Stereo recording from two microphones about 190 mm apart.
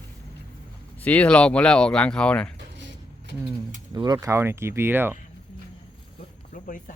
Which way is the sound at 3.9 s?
20° right (ahead or behind).